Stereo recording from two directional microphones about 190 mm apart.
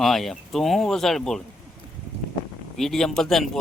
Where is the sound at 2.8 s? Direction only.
Centre (ahead or behind).